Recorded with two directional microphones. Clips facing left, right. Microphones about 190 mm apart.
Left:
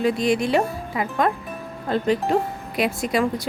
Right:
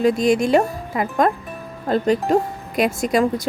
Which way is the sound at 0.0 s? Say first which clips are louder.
Right 4 dB; 45° right (ahead or behind).